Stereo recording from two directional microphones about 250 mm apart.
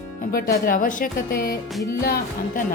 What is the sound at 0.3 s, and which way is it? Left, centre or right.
A woman's voice, left.